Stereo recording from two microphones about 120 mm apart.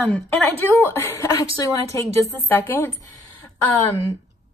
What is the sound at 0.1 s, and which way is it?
A woman's voice, 20° left (ahead or behind).